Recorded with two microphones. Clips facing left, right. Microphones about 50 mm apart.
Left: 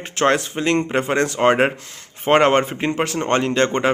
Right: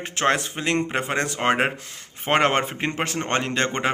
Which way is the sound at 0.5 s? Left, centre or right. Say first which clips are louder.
Left 5 dB; centre.